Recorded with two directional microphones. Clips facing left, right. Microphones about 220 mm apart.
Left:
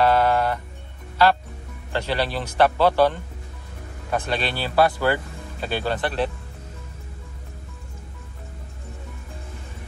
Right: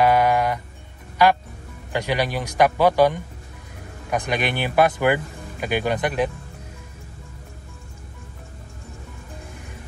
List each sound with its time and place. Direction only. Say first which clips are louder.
0.0 s music: right 1 dB; 15° right (ahead or behind)
1.2 s speech: right 1 dB; 15° right (ahead or behind)